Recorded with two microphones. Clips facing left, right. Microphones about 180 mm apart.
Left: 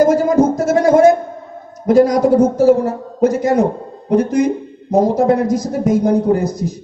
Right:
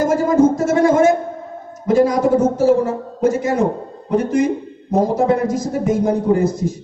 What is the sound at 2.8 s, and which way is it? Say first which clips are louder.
A woman's voice: left 2 dB; 40° left (ahead or behind).